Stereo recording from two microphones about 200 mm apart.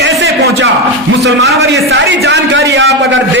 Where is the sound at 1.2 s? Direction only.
55° right (ahead or behind).